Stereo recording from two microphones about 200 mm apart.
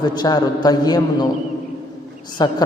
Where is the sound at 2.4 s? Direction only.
20° left (ahead or behind).